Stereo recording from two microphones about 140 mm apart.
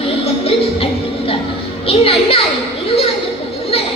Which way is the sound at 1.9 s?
45° left (ahead or behind).